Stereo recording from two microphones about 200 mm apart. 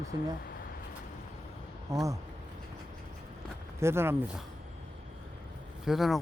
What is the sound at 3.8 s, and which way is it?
Speech, 10° right (ahead or behind).